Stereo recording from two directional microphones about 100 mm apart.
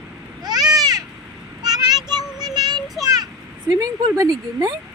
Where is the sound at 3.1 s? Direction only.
40° right (ahead or behind).